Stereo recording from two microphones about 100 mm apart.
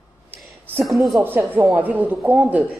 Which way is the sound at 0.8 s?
Centre (ahead or behind).